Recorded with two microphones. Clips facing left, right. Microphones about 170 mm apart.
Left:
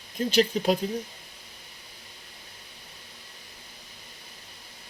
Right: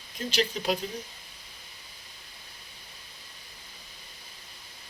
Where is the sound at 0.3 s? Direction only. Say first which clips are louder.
Left 5 dB; 45° left (ahead or behind).